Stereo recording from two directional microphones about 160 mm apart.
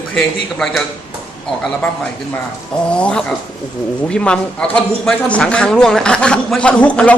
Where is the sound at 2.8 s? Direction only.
5° left (ahead or behind).